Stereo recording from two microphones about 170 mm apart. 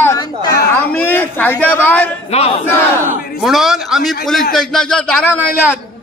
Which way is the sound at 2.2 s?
40° left (ahead or behind).